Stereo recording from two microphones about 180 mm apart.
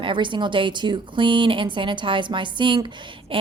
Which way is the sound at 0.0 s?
25° right (ahead or behind).